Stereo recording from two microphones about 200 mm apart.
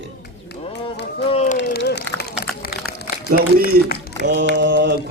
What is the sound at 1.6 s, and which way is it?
Run, 60° left (ahead or behind).